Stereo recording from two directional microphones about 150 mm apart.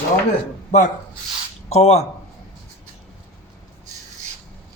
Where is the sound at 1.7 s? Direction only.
45° left (ahead or behind).